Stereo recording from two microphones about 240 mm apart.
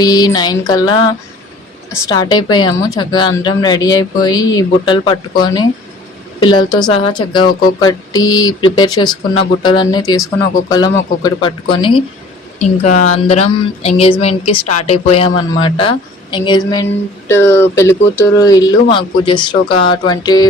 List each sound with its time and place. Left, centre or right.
0.0 s speech: centre
6.4 s speech: centre